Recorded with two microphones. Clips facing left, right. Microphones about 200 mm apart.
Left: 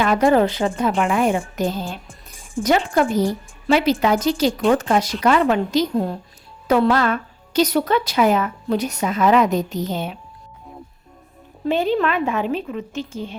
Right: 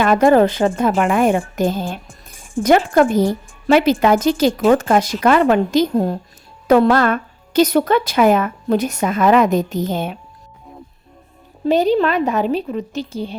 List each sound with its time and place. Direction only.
0.0 s a woman's voice: 50° right (ahead or behind)
11.6 s a woman's voice: 40° right (ahead or behind)